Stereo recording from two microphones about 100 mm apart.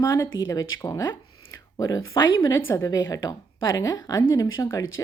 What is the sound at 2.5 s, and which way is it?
Speech, 35° left (ahead or behind).